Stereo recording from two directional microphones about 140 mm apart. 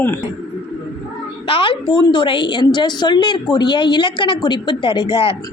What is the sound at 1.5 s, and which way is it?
A woman's voice, 35° left (ahead or behind).